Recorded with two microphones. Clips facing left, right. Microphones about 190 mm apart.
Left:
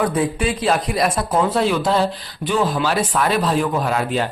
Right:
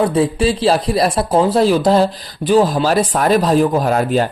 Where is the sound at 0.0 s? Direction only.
30° right (ahead or behind).